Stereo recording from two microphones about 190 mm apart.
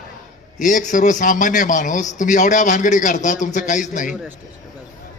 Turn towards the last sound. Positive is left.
turn(degrees=40)  # may be behind; listen again after turning